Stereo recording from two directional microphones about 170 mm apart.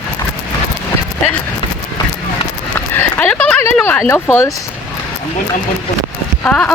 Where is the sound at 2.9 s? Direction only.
10° left (ahead or behind).